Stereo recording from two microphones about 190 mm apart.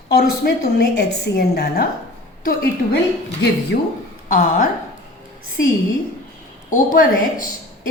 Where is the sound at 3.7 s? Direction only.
50° left (ahead or behind).